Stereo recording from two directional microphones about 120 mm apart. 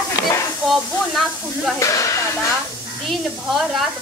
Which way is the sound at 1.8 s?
25° left (ahead or behind).